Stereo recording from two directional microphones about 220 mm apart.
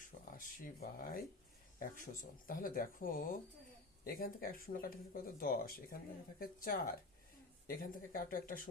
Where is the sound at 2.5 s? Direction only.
40° left (ahead or behind).